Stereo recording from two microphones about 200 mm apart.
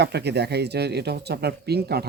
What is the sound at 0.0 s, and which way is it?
Speech, 55° right (ahead or behind).